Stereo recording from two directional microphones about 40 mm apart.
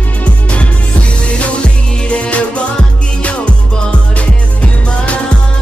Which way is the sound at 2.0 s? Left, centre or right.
Left.